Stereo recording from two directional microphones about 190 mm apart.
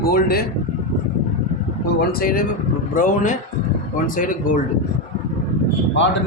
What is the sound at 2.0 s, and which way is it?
Speech, 55° left (ahead or behind).